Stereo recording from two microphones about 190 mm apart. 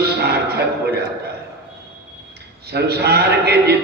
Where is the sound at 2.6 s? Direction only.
60° right (ahead or behind).